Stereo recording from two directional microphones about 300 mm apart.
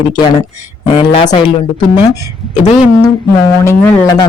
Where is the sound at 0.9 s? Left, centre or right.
Centre.